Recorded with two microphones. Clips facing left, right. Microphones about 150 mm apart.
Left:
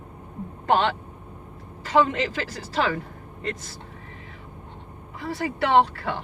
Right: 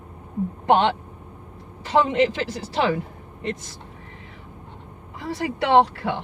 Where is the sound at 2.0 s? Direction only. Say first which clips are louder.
Right 4 dB; 20° right (ahead or behind).